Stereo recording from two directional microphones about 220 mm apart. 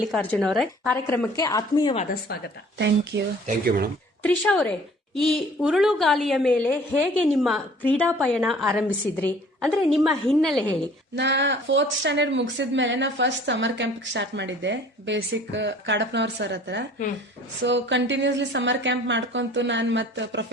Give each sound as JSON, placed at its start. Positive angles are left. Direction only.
{"t": 0.1, "sound": "a woman's voice", "side_deg": 5}
{"t": 2.7, "sound": "speech", "side_deg": -50}
{"t": 4.2, "sound": "a woman's voice", "side_deg": 5}
{"t": 11.2, "sound": "a woman's voice", "side_deg": -50}